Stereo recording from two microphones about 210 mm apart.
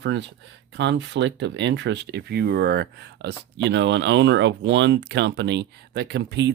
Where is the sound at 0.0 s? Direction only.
60° right (ahead or behind).